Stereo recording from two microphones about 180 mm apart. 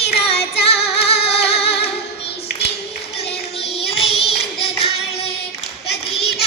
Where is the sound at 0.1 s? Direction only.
35° left (ahead or behind).